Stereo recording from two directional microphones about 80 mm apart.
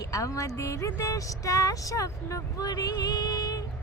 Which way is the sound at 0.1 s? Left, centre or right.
Left.